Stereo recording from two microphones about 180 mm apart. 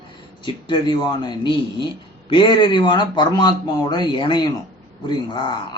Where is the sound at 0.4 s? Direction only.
25° left (ahead or behind).